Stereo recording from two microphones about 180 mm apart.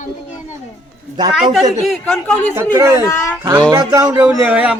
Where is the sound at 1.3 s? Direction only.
Centre (ahead or behind).